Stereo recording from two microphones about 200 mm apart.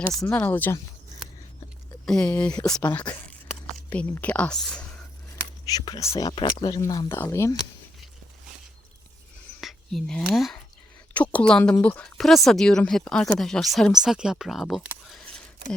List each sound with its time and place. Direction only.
0.2 s speech: 10° left (ahead or behind)
2.0 s speech: 5° left (ahead or behind)
5.6 s speech: 20° left (ahead or behind)
9.6 s speech: centre (ahead or behind)